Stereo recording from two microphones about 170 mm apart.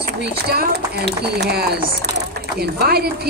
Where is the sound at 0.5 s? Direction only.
70° right (ahead or behind).